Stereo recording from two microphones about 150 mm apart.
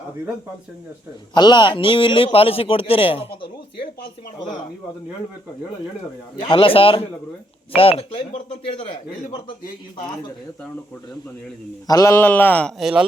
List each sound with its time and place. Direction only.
1.3 s a man's voice: 30° left (ahead or behind)
6.4 s a man's voice: 35° left (ahead or behind)
11.9 s a man's voice: 20° left (ahead or behind)
12.8 s speech: 5° right (ahead or behind)